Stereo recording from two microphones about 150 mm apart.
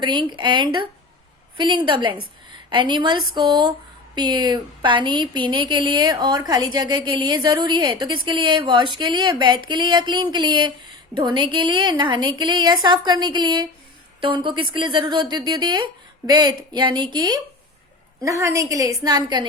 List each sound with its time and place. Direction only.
0.0 s a woman's voice: 30° right (ahead or behind)